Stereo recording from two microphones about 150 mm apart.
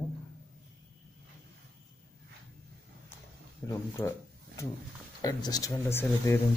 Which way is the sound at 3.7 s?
20° left (ahead or behind).